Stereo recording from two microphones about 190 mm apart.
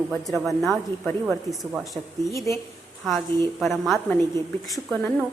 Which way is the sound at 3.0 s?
Centre (ahead or behind).